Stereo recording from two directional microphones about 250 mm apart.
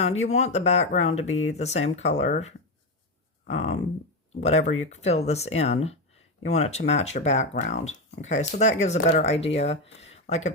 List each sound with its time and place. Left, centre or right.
0.0 s speech: left